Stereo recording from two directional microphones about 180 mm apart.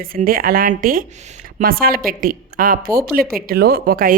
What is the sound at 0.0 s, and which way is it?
Speech, 50° right (ahead or behind).